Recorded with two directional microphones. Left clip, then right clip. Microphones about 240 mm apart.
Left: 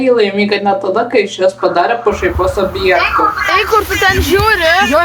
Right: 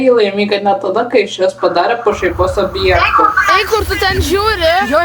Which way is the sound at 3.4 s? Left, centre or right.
Right.